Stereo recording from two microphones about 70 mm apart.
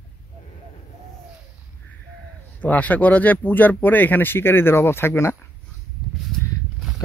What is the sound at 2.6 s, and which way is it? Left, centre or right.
Speech, left.